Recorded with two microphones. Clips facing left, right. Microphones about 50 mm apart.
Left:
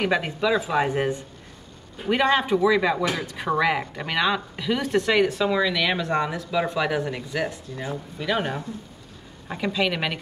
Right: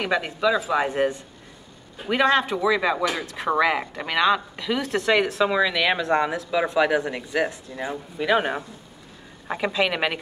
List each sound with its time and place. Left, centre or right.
0.0 s speech: centre
7.7 s speech: right
9.7 s speech: centre